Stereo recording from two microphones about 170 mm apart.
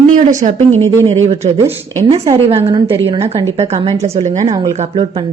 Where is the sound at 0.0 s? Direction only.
45° right (ahead or behind).